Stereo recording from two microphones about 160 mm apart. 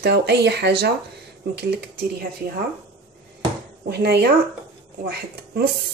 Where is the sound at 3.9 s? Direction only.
90° right.